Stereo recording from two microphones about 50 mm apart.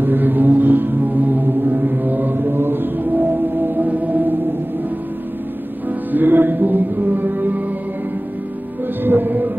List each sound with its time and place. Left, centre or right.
0.0 s music: right
5.9 s music: right
9.0 s music: right